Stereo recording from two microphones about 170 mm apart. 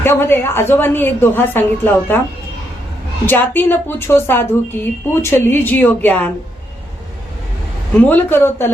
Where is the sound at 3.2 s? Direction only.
10° left (ahead or behind).